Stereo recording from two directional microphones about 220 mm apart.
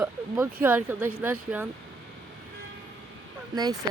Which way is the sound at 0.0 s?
10° right (ahead or behind).